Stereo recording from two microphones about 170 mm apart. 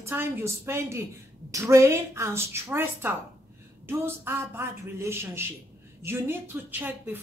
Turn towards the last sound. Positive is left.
turn(degrees=-10)  # may be behind; listen again after turning